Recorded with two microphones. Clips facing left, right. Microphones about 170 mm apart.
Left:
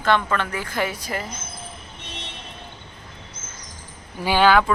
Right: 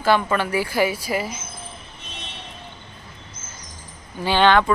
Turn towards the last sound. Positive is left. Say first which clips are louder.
# even
turn(degrees=5)  # may be behind; listen again after turning